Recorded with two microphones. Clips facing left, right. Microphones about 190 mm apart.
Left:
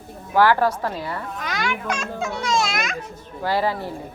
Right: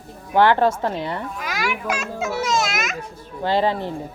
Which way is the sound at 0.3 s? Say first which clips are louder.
Right 1 dB; 25° right (ahead or behind).